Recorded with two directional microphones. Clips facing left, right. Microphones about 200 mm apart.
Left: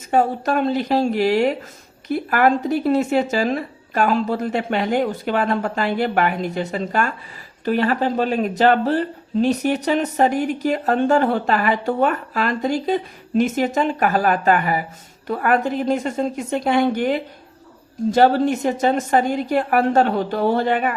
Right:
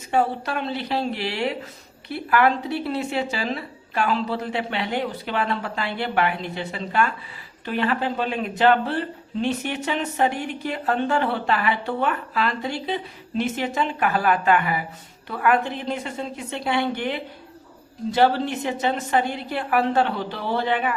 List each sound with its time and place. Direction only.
0.1 s speech: 45° left (ahead or behind)